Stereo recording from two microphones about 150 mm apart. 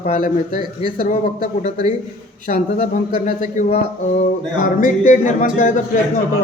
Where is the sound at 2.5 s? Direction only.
55° left (ahead or behind).